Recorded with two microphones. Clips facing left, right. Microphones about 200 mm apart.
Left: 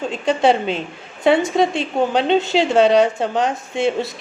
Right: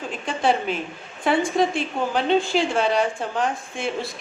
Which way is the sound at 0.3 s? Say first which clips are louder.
Left 6 dB; 25° left (ahead or behind).